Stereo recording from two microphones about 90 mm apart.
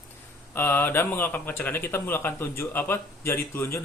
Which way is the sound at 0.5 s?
25° left (ahead or behind).